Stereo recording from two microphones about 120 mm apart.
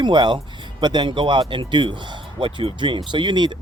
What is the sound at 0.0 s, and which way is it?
Speech, 40° right (ahead or behind).